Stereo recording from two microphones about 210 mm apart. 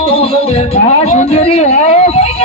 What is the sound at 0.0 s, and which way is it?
Music, 30° left (ahead or behind).